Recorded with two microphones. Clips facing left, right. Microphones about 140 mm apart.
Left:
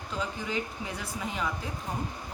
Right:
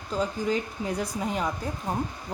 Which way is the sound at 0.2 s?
40° right (ahead or behind).